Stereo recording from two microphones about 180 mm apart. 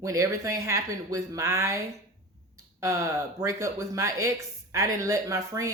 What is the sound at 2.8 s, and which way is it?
A woman's voice, 15° right (ahead or behind).